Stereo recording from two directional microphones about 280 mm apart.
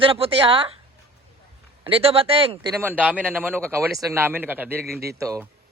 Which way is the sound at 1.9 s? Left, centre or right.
Centre.